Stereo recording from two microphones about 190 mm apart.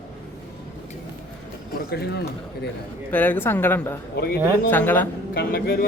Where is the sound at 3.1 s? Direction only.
10° left (ahead or behind).